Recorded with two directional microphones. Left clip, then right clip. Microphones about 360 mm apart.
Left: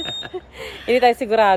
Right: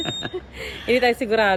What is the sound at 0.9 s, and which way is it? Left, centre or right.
Speech, centre.